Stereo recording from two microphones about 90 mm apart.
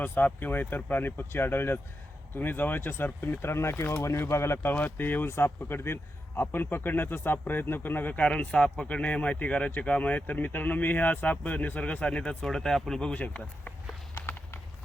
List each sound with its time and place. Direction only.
0.0 s a man's voice: 20° left (ahead or behind)